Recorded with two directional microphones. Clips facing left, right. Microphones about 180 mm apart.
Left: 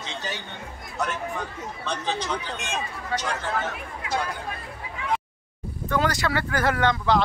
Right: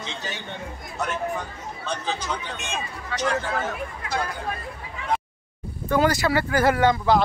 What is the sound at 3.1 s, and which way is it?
Speech, 45° left (ahead or behind).